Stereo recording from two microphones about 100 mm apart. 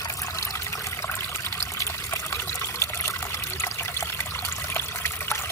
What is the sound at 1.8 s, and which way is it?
Trickle, 30° left (ahead or behind).